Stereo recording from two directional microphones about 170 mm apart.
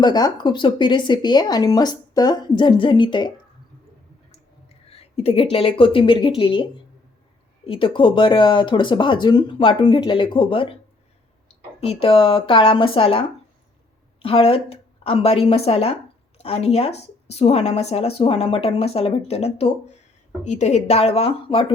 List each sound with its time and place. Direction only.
0.0 s speech: 25° left (ahead or behind)
7.7 s a woman's voice: 30° left (ahead or behind)